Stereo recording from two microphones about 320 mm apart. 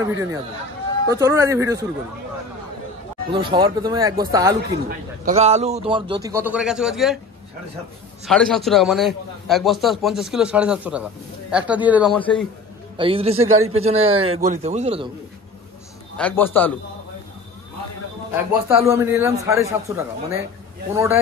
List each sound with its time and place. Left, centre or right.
0.0 s a man's voice: centre
3.3 s a man's voice: centre
4.8 s a man's voice: right; by 7.2 s centre
8.3 s a man's voice: centre
12.9 s a man's voice: centre
16.2 s a man's voice: centre
18.7 s a man's voice: centre